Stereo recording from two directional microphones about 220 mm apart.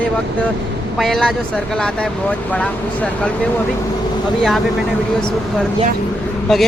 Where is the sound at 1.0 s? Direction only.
Centre (ahead or behind).